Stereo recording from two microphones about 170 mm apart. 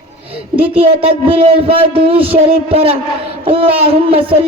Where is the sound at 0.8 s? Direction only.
35° right (ahead or behind).